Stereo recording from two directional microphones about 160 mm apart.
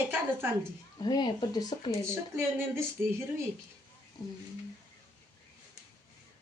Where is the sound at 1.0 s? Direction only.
25° left (ahead or behind).